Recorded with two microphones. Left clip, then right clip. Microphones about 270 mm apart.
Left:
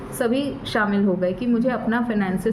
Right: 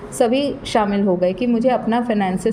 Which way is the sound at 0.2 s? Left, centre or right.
Right.